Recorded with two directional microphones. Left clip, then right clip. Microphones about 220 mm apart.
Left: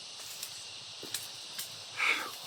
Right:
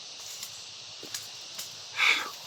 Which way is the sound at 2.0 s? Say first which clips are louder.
Right 6 dB; 10° right (ahead or behind).